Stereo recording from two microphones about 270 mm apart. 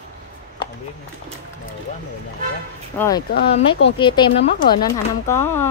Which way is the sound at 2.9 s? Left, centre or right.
Centre.